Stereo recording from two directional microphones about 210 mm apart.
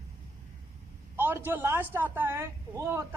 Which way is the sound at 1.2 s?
10° right (ahead or behind).